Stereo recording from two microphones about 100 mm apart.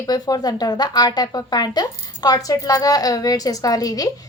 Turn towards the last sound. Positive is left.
turn(degrees=35)  # may be behind; listen again after turning